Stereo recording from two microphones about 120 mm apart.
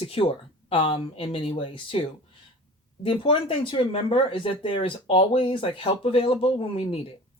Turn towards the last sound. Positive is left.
turn(degrees=50)  # may be behind; listen again after turning